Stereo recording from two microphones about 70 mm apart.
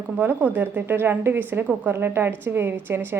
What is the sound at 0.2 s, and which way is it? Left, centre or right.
A woman's voice, right.